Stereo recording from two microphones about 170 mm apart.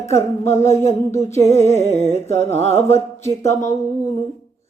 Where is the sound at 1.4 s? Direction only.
40° left (ahead or behind).